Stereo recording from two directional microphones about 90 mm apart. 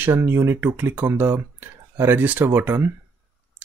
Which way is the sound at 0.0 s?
25° right (ahead or behind).